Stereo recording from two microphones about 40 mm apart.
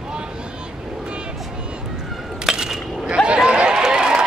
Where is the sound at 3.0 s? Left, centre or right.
Right.